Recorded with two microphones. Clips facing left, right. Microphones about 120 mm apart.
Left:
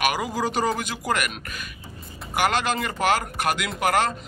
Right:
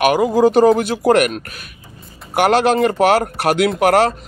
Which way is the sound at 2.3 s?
60° right (ahead or behind).